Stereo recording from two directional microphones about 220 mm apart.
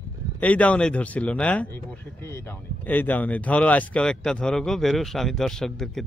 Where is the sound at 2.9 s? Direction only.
10° left (ahead or behind).